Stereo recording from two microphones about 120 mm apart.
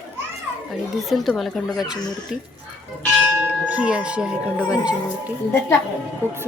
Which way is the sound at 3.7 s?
10° right (ahead or behind).